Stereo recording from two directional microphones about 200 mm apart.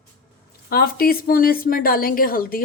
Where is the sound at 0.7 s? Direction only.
50° left (ahead or behind).